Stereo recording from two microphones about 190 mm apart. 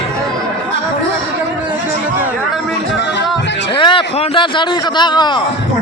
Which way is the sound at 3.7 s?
25° left (ahead or behind).